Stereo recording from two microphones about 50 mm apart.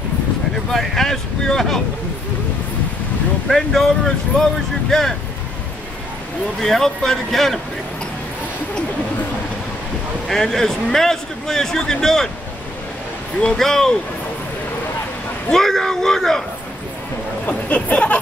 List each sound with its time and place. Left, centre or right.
0.7 s a man's voice: centre
3.4 s a man's voice: centre
6.6 s a man's voice: centre
10.2 s a man's voice: centre
13.4 s a man's voice: centre
15.5 s a man's voice: centre
17.5 s speech: left